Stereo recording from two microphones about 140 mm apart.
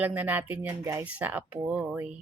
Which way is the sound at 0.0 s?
10° right (ahead or behind).